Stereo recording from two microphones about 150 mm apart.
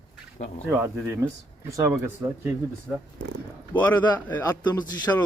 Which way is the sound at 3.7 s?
10° left (ahead or behind).